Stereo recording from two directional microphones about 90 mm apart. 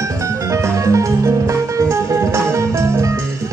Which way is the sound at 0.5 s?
35° right (ahead or behind).